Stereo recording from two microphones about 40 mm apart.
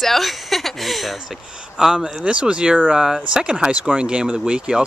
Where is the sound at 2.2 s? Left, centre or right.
Right.